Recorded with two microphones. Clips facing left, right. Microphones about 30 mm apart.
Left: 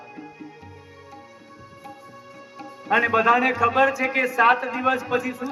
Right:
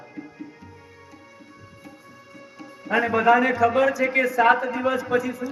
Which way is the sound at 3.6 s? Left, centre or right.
Left.